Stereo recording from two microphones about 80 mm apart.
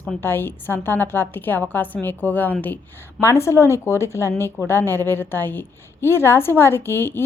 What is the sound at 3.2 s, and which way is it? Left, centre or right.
A woman's voice, left.